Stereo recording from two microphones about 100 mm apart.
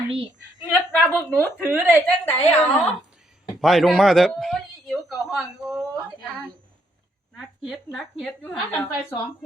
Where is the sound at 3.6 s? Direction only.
Centre (ahead or behind).